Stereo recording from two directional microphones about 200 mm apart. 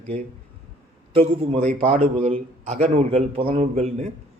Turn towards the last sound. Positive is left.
turn(degrees=-35)  # may be behind; listen again after turning